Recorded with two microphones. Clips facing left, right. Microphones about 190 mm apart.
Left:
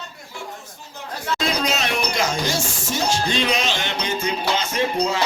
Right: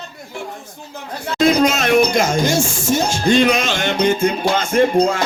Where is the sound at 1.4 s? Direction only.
50° right (ahead or behind).